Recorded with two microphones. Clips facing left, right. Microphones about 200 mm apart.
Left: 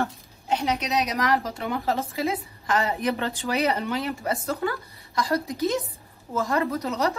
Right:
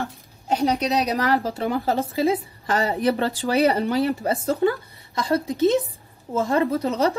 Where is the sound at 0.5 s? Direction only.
35° right (ahead or behind).